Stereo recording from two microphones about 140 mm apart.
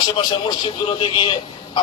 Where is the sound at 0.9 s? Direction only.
35° left (ahead or behind).